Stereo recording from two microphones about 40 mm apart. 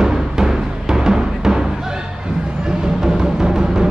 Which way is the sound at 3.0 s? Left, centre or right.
Centre.